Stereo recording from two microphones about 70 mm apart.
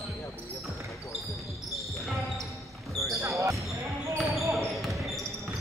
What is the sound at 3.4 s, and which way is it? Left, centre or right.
Basketball bounce, right.